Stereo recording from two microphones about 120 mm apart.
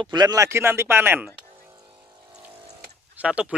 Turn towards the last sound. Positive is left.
turn(degrees=-10)  # may be behind; listen again after turning